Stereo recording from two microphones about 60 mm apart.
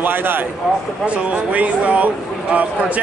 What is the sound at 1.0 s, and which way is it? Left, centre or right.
A man's voice, right.